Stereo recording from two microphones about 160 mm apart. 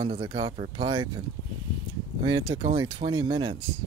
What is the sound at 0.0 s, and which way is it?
Speech, 35° right (ahead or behind).